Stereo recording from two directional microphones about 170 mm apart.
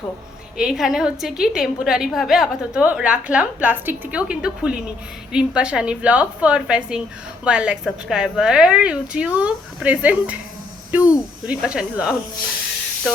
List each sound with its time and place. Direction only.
0.5 s a woman's voice: 5° right (ahead or behind)